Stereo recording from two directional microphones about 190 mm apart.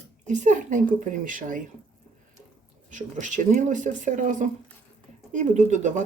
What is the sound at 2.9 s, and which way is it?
Speech, 40° right (ahead or behind).